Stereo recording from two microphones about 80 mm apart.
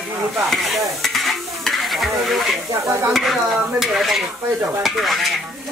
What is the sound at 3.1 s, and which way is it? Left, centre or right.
Stir, centre.